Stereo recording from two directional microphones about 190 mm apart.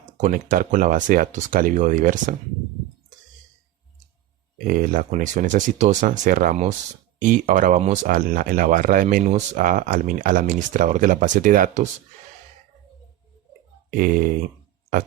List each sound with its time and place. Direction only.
0.2 s speech: 45° right (ahead or behind)
4.5 s speech: 45° right (ahead or behind)
13.9 s speech: 45° right (ahead or behind)